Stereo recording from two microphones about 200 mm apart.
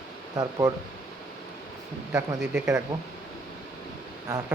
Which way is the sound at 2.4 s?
5° right (ahead or behind).